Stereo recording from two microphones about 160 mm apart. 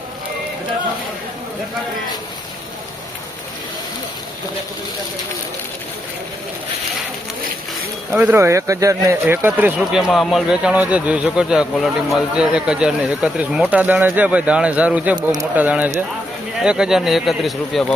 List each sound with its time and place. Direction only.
8.1 s a man's voice: 10° right (ahead or behind)